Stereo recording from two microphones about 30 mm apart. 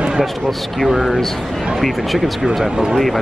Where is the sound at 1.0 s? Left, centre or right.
Centre.